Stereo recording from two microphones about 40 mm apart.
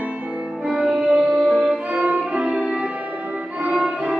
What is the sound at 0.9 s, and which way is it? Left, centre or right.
Music, right.